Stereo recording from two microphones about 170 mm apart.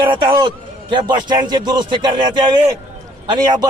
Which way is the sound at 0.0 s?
30° right (ahead or behind).